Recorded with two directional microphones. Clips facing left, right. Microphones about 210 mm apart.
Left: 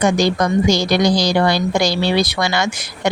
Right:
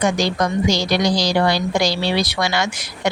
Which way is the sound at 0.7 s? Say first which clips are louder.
Left 3 dB; 50° left (ahead or behind).